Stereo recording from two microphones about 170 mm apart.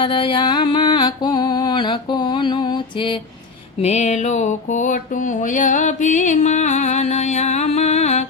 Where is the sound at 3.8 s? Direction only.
40° left (ahead or behind).